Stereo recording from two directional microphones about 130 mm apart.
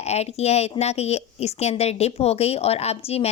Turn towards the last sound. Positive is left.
turn(degrees=50)  # may be behind; listen again after turning